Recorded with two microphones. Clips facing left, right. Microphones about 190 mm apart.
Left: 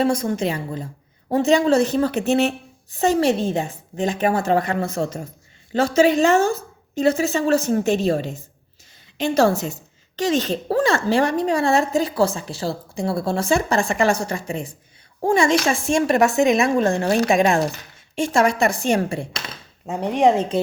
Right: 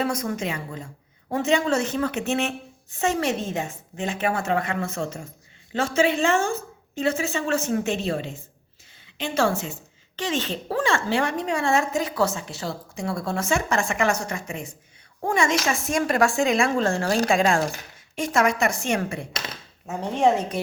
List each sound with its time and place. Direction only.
0.0 s a woman's voice: 30° left (ahead or behind)
19.9 s speech: 15° left (ahead or behind)